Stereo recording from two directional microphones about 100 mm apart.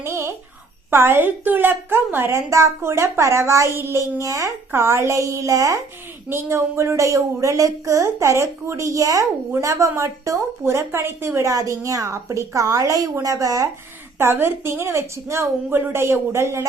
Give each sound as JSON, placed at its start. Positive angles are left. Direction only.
{"t": 0.0, "sound": "a sound", "side_deg": -25}
{"t": 0.9, "sound": "a woman's voice", "side_deg": -25}
{"t": 14.2, "sound": "a woman's voice", "side_deg": -25}